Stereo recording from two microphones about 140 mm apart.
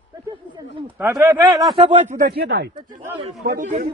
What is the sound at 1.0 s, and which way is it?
Speech, 20° right (ahead or behind).